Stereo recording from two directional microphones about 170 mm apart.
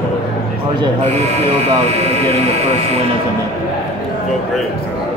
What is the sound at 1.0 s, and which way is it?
Speech, 35° right (ahead or behind).